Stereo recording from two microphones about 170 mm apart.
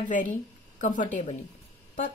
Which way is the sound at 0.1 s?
45° left (ahead or behind).